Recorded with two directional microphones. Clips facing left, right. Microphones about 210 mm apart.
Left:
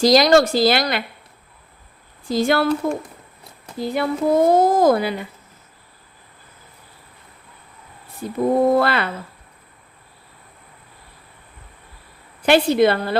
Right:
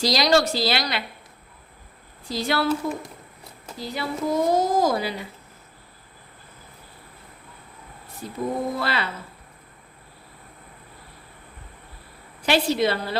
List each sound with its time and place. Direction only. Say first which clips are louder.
0.0 s speech: left 7 dB; 50° left (ahead or behind)
2.3 s speech: left 7 dB; 50° left (ahead or behind)
3.8 s a woman's voice: left 7 dB; 55° left (ahead or behind)
8.4 s a woman's voice: left 10 dB; 60° left (ahead or behind)
12.4 s a woman's voice: left 6 dB; 55° left (ahead or behind)